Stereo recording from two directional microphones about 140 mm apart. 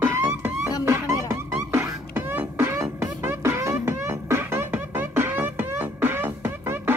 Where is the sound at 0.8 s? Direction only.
20° right (ahead or behind).